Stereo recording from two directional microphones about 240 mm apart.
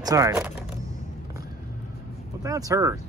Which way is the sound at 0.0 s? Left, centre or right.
Centre.